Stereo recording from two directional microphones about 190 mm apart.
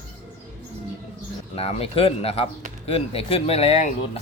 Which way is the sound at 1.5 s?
30° left (ahead or behind).